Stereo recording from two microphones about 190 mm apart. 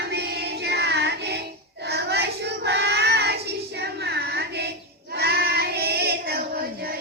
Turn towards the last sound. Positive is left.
turn(degrees=-55)  # may be behind; listen again after turning